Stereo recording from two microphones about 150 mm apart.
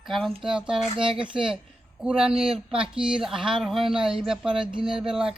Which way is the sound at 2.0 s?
5° right (ahead or behind).